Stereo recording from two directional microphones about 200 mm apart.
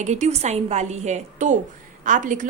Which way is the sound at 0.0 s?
35° right (ahead or behind).